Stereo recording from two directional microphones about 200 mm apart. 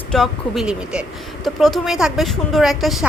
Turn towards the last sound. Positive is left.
turn(degrees=0)  # may be behind; listen again after turning